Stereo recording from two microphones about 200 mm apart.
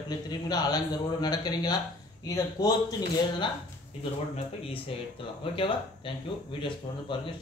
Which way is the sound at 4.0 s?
30° left (ahead or behind).